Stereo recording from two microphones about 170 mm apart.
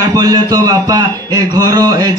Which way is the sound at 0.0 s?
25° right (ahead or behind).